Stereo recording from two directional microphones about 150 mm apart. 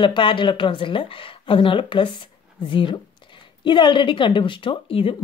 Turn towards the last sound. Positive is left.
turn(degrees=35)  # may be behind; listen again after turning